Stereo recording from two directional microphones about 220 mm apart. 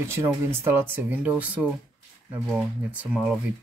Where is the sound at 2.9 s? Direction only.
5° right (ahead or behind).